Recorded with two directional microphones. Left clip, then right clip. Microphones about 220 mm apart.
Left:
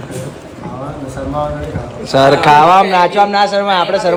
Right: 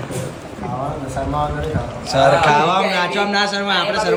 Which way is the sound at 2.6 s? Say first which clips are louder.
Left 9 dB; 60° left (ahead or behind).